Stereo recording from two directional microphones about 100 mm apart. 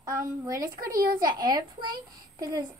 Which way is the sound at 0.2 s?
35° right (ahead or behind).